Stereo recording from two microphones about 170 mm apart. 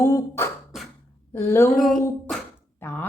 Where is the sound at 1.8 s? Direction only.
Centre (ahead or behind).